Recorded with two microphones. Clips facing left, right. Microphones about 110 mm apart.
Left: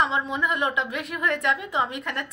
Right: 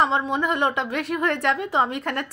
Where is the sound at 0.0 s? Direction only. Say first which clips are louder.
Right 3 dB; 30° right (ahead or behind).